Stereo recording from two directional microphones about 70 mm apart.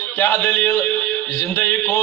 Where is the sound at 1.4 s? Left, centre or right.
Left.